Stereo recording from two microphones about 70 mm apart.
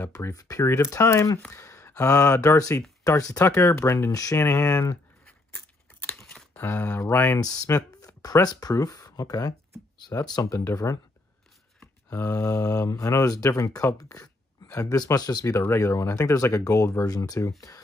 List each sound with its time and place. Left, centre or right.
0.3 s speech: left
3.0 s speech: left
3.3 s speech: left
4.1 s speech: left
4.4 s speech: left
6.6 s speech: left
7.3 s speech: left
8.7 s speech: left
10.8 s speech: left
13.9 s a sound: left
15.1 s speech: left
15.8 s speech: left